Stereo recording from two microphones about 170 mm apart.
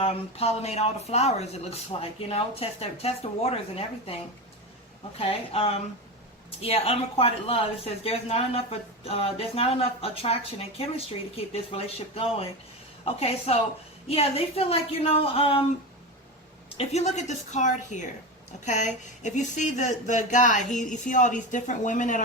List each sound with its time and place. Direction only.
0.0 s speech: 35° left (ahead or behind)
5.1 s speech: 35° left (ahead or behind)
16.6 s speech: 40° left (ahead or behind)